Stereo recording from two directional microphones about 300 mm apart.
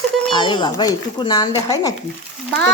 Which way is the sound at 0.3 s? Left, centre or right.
Centre.